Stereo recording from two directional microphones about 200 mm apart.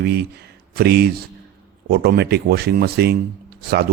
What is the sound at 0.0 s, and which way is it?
Speech, 50° right (ahead or behind).